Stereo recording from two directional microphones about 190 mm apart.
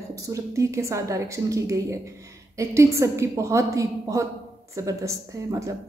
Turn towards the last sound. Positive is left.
turn(degrees=-15)  # may be behind; listen again after turning